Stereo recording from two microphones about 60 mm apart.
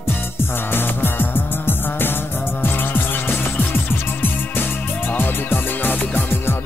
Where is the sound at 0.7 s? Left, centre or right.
Left.